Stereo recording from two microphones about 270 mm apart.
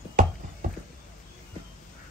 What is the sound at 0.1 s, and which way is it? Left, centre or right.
Clip-clop, right.